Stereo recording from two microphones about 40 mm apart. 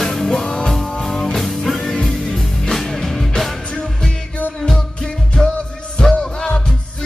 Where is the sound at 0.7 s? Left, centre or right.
Centre.